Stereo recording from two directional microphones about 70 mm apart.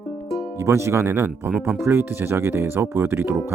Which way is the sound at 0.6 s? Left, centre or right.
Right.